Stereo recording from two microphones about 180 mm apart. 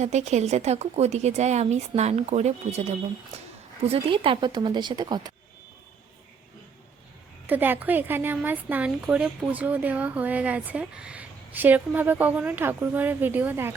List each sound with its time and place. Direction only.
0.0 s a woman's voice: 40° right (ahead or behind); by 5.3 s 25° right (ahead or behind)
7.4 s a woman's voice: 10° right (ahead or behind)